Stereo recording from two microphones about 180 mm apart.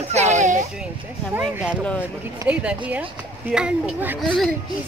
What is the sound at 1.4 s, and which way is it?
Speech, 5° right (ahead or behind).